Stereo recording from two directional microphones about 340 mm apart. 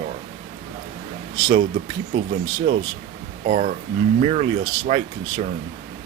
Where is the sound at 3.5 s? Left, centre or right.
Right.